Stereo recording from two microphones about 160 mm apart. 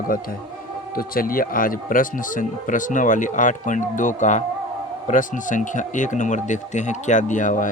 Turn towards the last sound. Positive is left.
turn(degrees=55)  # may be behind; listen again after turning